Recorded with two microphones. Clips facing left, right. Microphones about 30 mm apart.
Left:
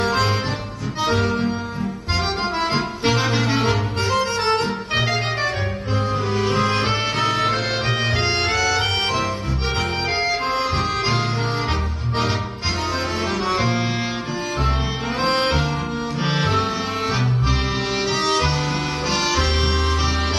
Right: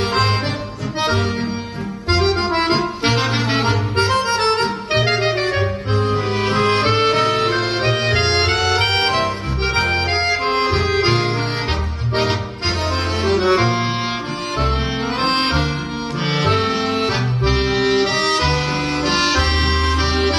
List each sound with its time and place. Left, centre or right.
0.0 s accordion: right
2.5 s accordion: right
3.2 s music: right
4.3 s accordion: right
4.9 s music: right
6.3 s music: right
6.7 s music: right
13.4 s music: right
15.2 s music: right
16.3 s accordion: right
17.7 s music: right